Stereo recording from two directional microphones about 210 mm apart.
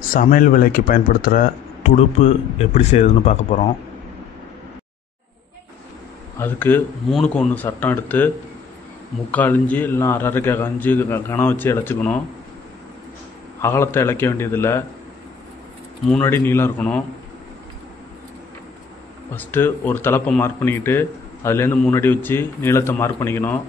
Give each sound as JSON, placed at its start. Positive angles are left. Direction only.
{"t": 0.1, "sound": "speech", "side_deg": 40}
{"t": 6.3, "sound": "speech", "side_deg": 10}
{"t": 9.3, "sound": "speech", "side_deg": 10}
{"t": 13.6, "sound": "speech", "side_deg": 10}
{"t": 16.1, "sound": "speech", "side_deg": 10}
{"t": 19.3, "sound": "speech", "side_deg": 10}